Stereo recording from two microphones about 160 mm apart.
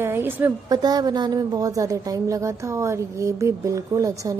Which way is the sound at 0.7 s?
25° right (ahead or behind).